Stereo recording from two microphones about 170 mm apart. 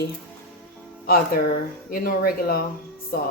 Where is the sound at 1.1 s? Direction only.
60° left (ahead or behind).